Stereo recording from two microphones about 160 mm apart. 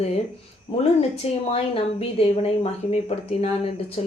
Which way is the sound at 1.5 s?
40° left (ahead or behind).